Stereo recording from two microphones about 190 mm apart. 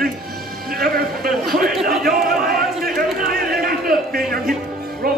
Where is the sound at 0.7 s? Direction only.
50° right (ahead or behind).